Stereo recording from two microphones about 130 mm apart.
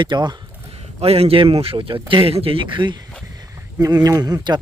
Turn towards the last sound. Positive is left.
turn(degrees=-30)  # may be behind; listen again after turning